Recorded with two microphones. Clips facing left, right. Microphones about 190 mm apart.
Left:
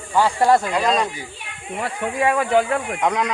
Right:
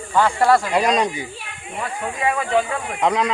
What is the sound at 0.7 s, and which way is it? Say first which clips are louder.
Speech: right 2 dB; 20° right (ahead or behind).